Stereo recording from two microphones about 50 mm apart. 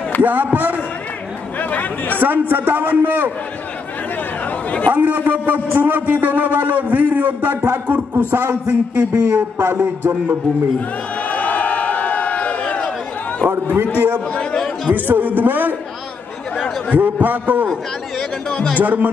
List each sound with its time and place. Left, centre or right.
0.2 s a man's voice: right
1.6 s speech: left
2.1 s a man's voice: right
4.5 s chatter: left
4.9 s a man's voice: right
11.2 s a sound: left
13.5 s a man's voice: right
14.3 s a sound: left
14.9 s a man's voice: right
16.9 s a man's voice: right
18.5 s speech: centre
18.8 s a man's voice: right